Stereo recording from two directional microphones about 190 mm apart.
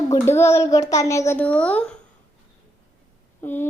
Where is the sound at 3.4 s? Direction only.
10° left (ahead or behind).